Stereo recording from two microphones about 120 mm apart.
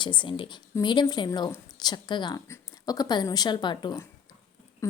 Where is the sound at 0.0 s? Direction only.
40° left (ahead or behind).